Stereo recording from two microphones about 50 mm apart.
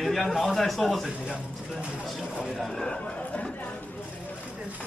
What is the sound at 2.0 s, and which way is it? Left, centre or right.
Speech, centre.